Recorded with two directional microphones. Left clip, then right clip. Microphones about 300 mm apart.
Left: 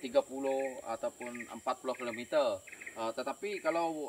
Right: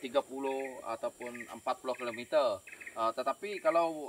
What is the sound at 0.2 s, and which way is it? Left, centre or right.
Speech, right.